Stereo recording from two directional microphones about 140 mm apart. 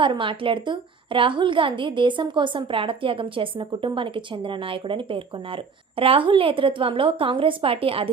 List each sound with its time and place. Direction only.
0.0 s a woman's voice: 35° right (ahead or behind)